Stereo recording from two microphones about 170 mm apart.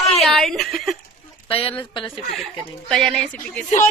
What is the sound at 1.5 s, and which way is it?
Speech, 35° left (ahead or behind).